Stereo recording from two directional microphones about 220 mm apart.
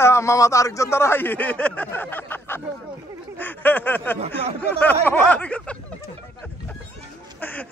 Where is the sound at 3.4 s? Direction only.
10° left (ahead or behind).